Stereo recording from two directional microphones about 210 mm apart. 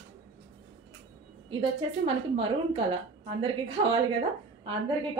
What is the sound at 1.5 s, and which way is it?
A woman's voice, 25° right (ahead or behind).